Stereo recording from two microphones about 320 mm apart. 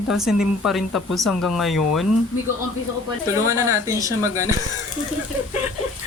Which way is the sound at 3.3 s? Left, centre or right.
Centre.